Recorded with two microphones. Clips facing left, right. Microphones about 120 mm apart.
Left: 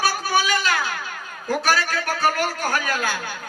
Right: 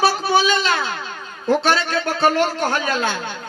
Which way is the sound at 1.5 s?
25° right (ahead or behind).